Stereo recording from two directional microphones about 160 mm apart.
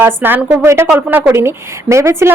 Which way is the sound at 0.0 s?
10° right (ahead or behind).